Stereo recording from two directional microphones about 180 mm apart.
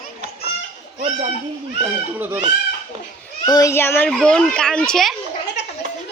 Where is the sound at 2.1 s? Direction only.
10° right (ahead or behind).